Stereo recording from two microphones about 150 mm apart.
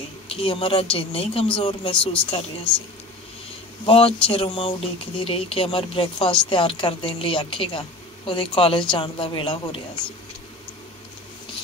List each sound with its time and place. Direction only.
0.3 s speech: 40° left (ahead or behind)
3.8 s speech: 40° left (ahead or behind)